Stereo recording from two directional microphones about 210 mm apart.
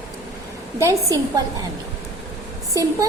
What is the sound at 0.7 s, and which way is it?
Speech, 15° right (ahead or behind).